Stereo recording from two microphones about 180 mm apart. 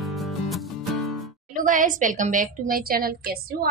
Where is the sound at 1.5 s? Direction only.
45° right (ahead or behind).